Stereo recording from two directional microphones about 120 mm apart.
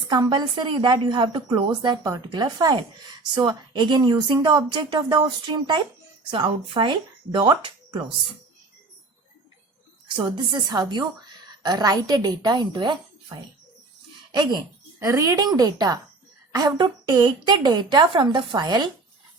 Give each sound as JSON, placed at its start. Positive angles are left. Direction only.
{"t": 0.1, "sound": "a woman's voice", "side_deg": -35}
{"t": 10.2, "sound": "a woman's voice", "side_deg": -40}
{"t": 14.9, "sound": "a woman's voice", "side_deg": -25}